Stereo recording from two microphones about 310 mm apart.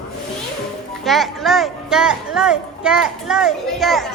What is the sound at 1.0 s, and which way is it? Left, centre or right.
Speech, centre.